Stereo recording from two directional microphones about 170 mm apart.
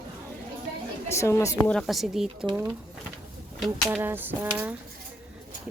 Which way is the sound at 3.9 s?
10° right (ahead or behind).